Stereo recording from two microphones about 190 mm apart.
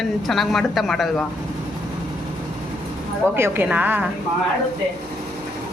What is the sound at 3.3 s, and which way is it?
Speech, 10° right (ahead or behind).